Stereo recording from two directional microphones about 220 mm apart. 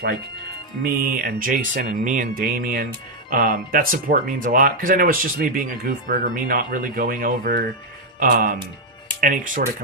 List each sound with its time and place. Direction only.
0.8 s speech: 40° right (ahead or behind)